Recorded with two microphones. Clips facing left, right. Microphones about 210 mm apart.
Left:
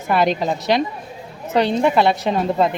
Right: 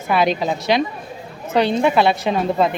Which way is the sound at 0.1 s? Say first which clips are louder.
Even; 5° right (ahead or behind).